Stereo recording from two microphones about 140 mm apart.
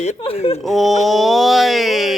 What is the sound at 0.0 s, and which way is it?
Speech, 45° left (ahead or behind).